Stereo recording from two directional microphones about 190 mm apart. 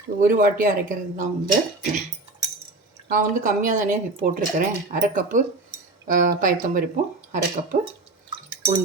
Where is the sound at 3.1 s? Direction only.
45° right (ahead or behind).